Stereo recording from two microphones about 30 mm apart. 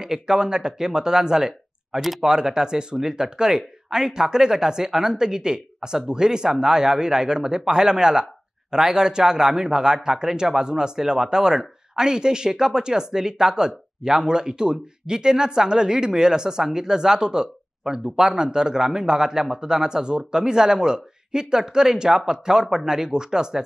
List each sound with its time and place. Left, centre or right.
0.0 s speech: right
2.0 s speech: centre
2.2 s speech: right